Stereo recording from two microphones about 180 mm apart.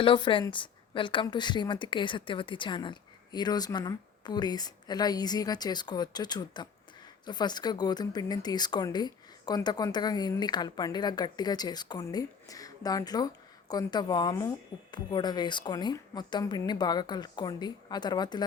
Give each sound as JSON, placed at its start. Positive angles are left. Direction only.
{"t": 0.0, "sound": "speech", "side_deg": 25}